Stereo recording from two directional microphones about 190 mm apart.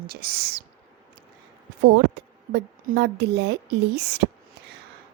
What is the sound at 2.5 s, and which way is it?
A woman's voice, 60° right (ahead or behind).